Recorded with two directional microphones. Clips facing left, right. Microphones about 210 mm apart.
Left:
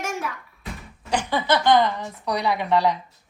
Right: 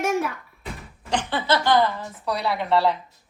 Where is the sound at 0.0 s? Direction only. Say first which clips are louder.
Right 6 dB; 60° right (ahead or behind).